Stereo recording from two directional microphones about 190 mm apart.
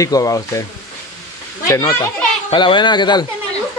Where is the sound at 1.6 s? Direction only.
15° left (ahead or behind).